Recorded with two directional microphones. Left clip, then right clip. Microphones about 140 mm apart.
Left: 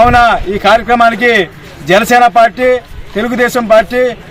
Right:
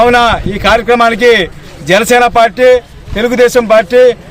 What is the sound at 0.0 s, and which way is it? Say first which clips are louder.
A man's voice: left 1 dB; 35° right (ahead or behind).